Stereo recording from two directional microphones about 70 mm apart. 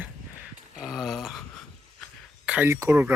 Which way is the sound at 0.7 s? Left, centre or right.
Centre.